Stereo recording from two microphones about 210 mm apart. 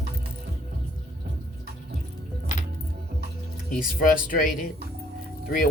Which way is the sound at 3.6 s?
40° left (ahead or behind).